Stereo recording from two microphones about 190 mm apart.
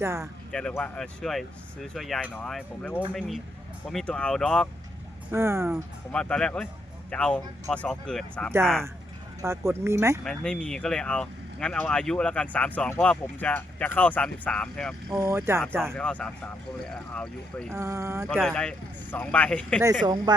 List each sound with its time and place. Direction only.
0.0 s speech: 15° right (ahead or behind)
0.5 s speech: 5° left (ahead or behind)
5.3 s speech: 15° right (ahead or behind)
5.7 s speech: 5° left (ahead or behind)
9.4 s speech: 15° right (ahead or behind)
10.2 s speech: 5° left (ahead or behind)
15.2 s speech: 15° right (ahead or behind)
15.8 s speech: 5° left (ahead or behind)
17.7 s speech: 15° right (ahead or behind)
18.4 s speech: 5° left (ahead or behind)
20.1 s speech: 20° right (ahead or behind)